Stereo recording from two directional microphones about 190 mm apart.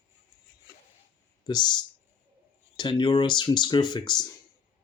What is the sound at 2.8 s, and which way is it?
Speech, 25° left (ahead or behind).